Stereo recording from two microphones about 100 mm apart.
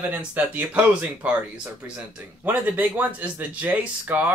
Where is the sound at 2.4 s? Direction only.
20° right (ahead or behind).